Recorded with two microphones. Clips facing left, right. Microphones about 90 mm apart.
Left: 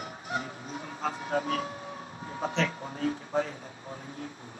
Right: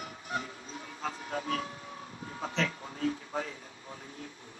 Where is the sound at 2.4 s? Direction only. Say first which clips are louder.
Left 3 dB; 40° left (ahead or behind).